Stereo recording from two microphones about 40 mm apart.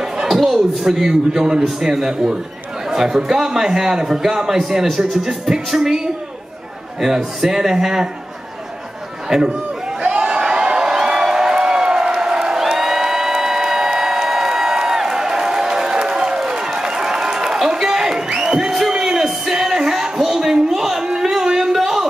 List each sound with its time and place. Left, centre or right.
0.3 s a man's voice: centre
2.9 s chatter: centre
3.3 s a man's voice: centre
9.3 s a man's voice: centre
10.0 s crowd: centre
19.2 s a sound: centre